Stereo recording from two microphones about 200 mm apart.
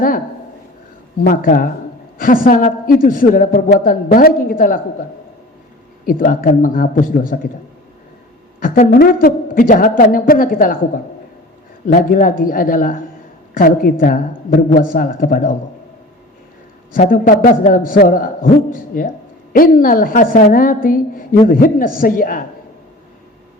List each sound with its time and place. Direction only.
1.2 s a woman's voice: 45° left (ahead or behind)
6.1 s a woman's voice: 45° left (ahead or behind)
8.6 s a woman's voice: 45° left (ahead or behind)
16.9 s a woman's voice: 45° left (ahead or behind)